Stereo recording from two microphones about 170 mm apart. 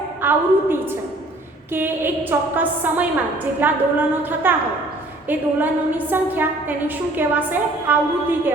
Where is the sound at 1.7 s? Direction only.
10° right (ahead or behind).